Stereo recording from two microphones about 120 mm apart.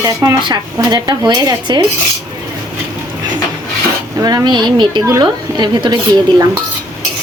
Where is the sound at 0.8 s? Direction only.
35° right (ahead or behind).